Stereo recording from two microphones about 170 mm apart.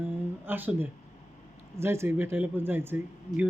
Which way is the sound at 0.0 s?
10° right (ahead or behind).